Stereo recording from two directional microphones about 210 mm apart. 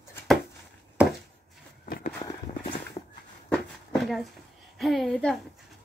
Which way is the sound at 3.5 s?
Centre (ahead or behind).